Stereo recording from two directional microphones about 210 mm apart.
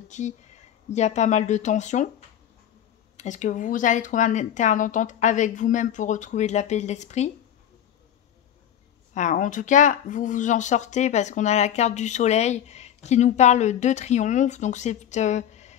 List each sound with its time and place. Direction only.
0.1 s speech: 35° left (ahead or behind)
9.1 s speech: 35° left (ahead or behind)